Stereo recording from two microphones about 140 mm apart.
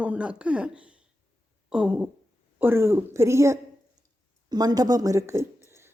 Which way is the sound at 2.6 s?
15° right (ahead or behind).